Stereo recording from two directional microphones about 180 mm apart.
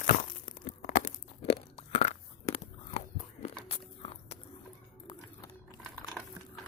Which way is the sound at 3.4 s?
30° left (ahead or behind).